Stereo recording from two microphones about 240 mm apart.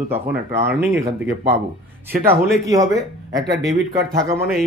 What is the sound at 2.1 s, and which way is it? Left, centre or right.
Speech, right.